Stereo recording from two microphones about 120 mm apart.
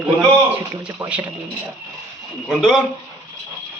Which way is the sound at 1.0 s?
25° right (ahead or behind).